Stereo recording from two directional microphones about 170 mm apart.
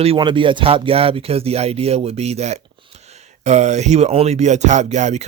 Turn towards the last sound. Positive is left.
turn(degrees=-40)  # may be behind; listen again after turning